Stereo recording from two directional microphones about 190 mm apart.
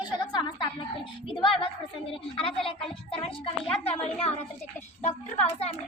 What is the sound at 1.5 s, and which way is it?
A woman's voice, 30° left (ahead or behind).